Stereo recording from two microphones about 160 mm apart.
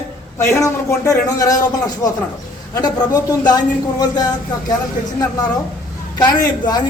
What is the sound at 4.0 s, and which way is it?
Speech, 25° left (ahead or behind).